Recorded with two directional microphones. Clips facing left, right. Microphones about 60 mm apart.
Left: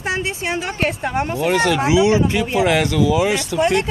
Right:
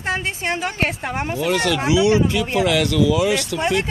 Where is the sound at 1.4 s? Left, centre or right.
Left.